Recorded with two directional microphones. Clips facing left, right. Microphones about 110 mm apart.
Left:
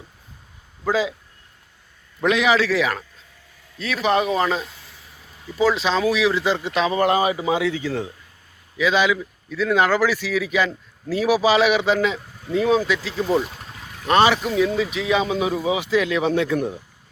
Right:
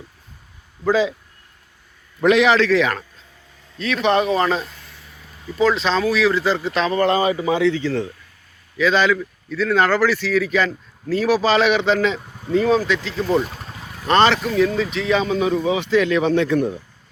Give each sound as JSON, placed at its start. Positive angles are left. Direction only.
{"t": 0.9, "sound": "speech", "side_deg": 5}
{"t": 2.4, "sound": "speech", "side_deg": 5}
{"t": 14.1, "sound": "speech", "side_deg": 10}